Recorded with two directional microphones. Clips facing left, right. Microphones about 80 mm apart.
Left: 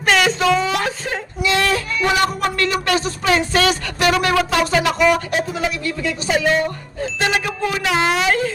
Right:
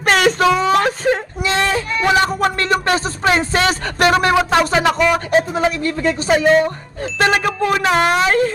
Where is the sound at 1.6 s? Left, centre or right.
Right.